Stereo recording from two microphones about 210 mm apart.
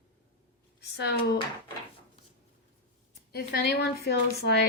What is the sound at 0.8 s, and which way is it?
Speech, 55° left (ahead or behind).